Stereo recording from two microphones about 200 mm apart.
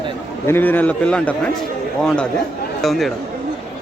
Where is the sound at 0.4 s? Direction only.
10° left (ahead or behind).